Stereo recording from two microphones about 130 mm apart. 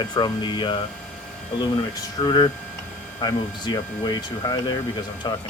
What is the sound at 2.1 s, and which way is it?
Speech, 35° left (ahead or behind).